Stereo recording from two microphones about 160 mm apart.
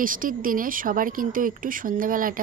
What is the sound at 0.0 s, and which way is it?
Stir, 60° right (ahead or behind).